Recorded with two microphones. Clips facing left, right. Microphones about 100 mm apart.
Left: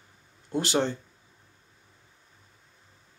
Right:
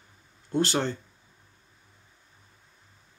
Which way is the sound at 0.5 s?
15° left (ahead or behind).